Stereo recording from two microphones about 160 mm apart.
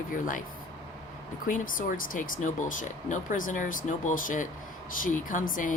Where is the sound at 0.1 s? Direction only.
55° left (ahead or behind).